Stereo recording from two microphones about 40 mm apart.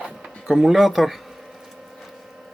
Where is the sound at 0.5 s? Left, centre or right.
Centre.